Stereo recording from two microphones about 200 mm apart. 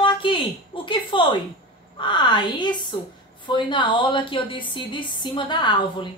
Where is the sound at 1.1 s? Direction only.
25° left (ahead or behind).